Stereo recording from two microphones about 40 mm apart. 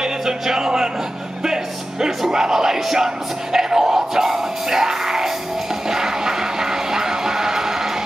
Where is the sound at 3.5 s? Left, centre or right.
Centre.